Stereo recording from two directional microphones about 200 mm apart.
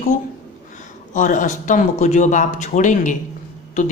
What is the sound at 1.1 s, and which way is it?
Speech, 40° left (ahead or behind).